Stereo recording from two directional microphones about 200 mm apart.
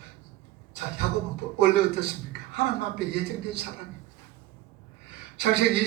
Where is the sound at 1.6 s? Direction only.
55° right (ahead or behind).